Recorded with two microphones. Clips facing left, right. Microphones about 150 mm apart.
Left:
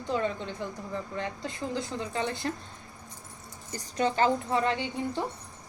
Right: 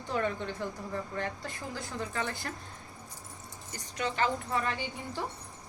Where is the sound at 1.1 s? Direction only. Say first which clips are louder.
Left 2 dB; 20° left (ahead or behind).